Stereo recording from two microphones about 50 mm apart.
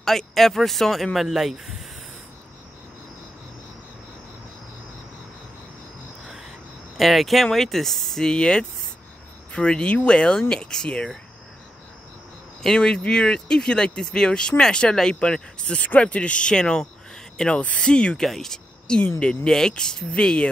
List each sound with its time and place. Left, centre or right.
0.0 s speech: centre
7.0 s speech: centre
12.7 s speech: left
15.8 s speech: left
18.2 s speech: centre